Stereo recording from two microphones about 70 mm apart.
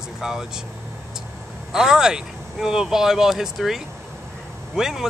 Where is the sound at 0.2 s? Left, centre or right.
Centre.